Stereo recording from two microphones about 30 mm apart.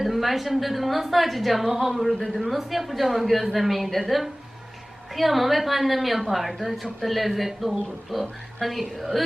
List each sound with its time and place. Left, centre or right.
0.0 s a woman's voice: centre
2.1 s speech: centre
2.4 s a woman's voice: centre
5.1 s a woman's voice: centre